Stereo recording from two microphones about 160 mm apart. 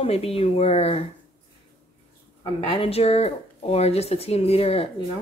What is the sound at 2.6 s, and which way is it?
Speech, 35° left (ahead or behind).